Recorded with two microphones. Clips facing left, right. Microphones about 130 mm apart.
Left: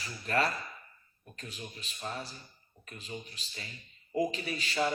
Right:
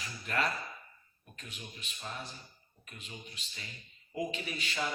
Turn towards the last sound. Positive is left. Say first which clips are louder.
# left 5 dB
turn(degrees=35)  # may be behind; listen again after turning